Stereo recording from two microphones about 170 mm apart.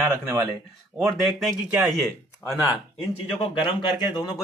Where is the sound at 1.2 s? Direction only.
Centre (ahead or behind).